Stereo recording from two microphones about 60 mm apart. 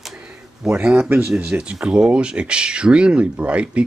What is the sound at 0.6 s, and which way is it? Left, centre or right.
A man's voice, centre.